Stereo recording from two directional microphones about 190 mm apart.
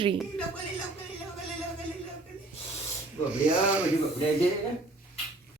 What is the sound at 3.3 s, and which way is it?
Speech, 5° right (ahead or behind).